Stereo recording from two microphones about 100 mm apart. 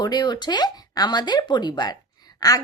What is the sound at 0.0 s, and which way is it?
Speech, 45° left (ahead or behind).